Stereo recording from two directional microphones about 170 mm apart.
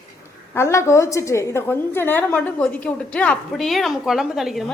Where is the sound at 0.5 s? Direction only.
15° left (ahead or behind); by 4.6 s centre (ahead or behind).